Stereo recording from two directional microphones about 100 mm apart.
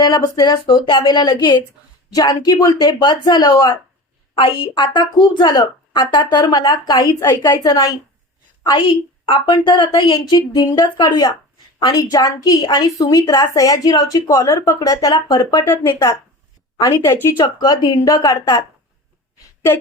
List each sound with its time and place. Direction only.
0.0 s a woman's voice: 40° left (ahead or behind)
4.4 s a woman's voice: 60° left (ahead or behind); by 7.3 s 30° left (ahead or behind)
7.4 s a woman's voice: 45° left (ahead or behind)
8.6 s a woman's voice: 50° left (ahead or behind)
9.6 s a woman's voice: 50° left (ahead or behind); by 14.8 s 30° left (ahead or behind)
14.8 s a woman's voice: 45° left (ahead or behind)
15.7 s speech: 25° left (ahead or behind)
17.4 s a woman's voice: 40° left (ahead or behind)